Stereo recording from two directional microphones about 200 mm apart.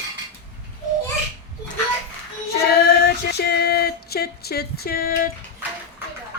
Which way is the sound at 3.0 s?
55° left (ahead or behind).